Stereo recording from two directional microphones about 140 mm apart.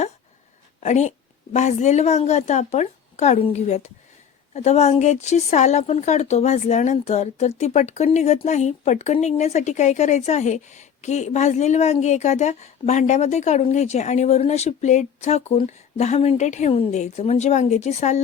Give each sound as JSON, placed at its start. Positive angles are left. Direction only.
{"t": 0.8, "sound": "a woman's voice", "side_deg": 55}